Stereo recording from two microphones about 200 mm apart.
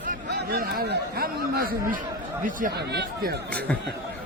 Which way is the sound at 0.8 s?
50° right (ahead or behind).